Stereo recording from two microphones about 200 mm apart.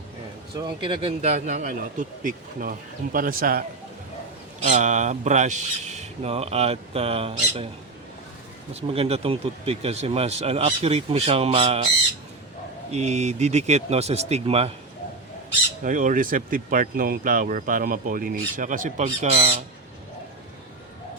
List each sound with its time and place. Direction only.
0.5 s speech: 25° right (ahead or behind); by 3.6 s 45° right (ahead or behind)
4.6 s speech: 35° right (ahead or behind)
8.7 s speech: 30° right (ahead or behind)
12.9 s speech: 35° right (ahead or behind)
15.8 s speech: 40° right (ahead or behind)